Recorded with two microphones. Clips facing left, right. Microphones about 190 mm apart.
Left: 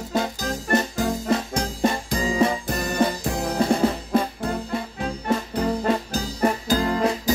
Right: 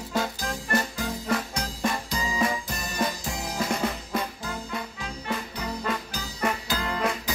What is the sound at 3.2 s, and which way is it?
Drum kit, 60° left (ahead or behind).